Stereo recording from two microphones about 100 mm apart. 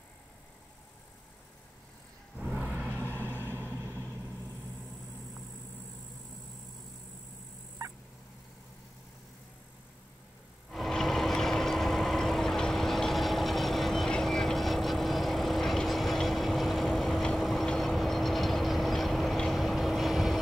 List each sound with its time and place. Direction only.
2.3 s vehicle: 10° right (ahead or behind)
3.4 s vehicle: 25° right (ahead or behind)
10.7 s vehicle: centre (ahead or behind)